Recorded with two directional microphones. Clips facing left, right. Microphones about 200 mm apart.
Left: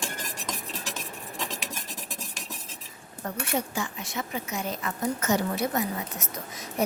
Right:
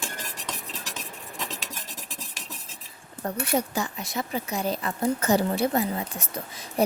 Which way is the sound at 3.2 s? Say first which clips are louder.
Right 4 dB; 40° right (ahead or behind).